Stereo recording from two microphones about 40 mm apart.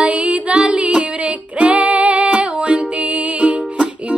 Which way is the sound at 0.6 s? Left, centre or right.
Right.